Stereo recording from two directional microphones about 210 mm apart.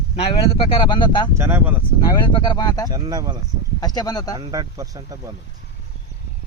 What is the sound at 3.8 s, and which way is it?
Speech, 20° left (ahead or behind).